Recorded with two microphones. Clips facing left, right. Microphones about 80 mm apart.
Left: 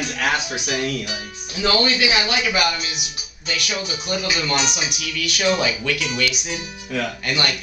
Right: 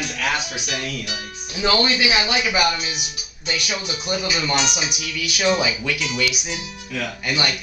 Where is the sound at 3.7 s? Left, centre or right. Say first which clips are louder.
Left 1 dB; centre.